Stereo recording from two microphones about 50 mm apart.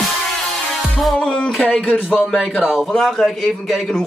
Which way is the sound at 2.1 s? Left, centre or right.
Centre.